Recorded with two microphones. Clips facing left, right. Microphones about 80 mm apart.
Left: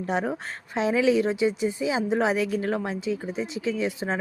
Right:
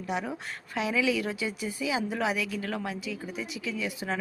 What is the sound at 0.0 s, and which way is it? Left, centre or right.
A woman's voice, left.